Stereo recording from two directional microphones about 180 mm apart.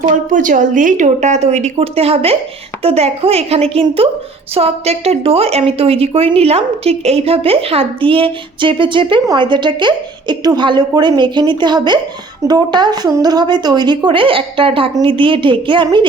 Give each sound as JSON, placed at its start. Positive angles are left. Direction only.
{"t": 0.3, "sound": "a woman's voice", "side_deg": -45}